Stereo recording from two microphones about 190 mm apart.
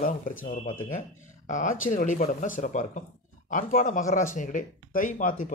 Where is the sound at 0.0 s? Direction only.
45° left (ahead or behind).